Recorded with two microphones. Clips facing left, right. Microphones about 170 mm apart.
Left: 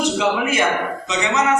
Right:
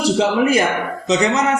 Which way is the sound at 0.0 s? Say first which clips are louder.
Right 4 dB; 35° right (ahead or behind).